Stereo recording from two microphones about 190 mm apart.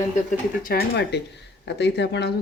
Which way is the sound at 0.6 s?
60° left (ahead or behind).